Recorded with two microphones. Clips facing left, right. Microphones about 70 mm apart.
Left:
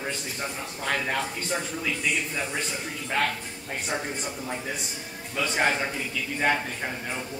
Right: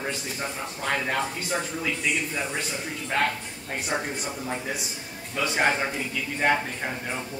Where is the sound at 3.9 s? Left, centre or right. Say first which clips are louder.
Right 2 dB; centre.